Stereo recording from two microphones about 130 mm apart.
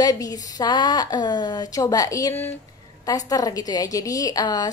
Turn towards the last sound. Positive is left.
turn(degrees=30)  # may be behind; listen again after turning